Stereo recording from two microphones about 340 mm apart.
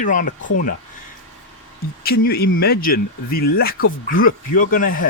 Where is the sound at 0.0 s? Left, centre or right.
Left.